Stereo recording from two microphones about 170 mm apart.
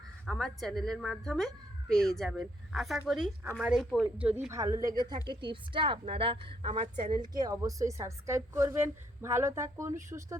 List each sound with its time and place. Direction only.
0.3 s speech: centre (ahead or behind)
4.4 s a woman's voice: 20° right (ahead or behind)